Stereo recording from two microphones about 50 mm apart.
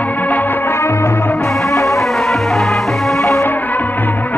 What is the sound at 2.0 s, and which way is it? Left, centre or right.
Music, centre.